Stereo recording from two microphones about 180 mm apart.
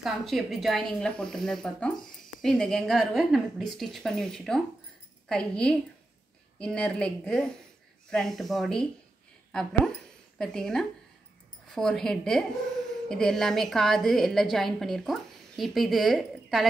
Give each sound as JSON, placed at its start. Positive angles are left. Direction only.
{"t": 0.0, "sound": "a woman's voice", "side_deg": 0}